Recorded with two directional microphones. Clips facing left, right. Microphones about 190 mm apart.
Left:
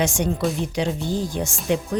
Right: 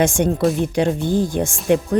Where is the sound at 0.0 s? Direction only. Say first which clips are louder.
Right 5 dB; 50° right (ahead or behind).